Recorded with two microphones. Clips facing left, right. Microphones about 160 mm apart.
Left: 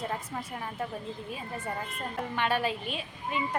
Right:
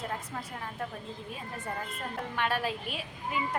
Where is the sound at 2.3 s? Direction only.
Centre (ahead or behind).